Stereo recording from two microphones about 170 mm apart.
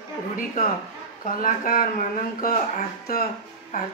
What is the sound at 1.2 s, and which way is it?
Speech, 55° left (ahead or behind).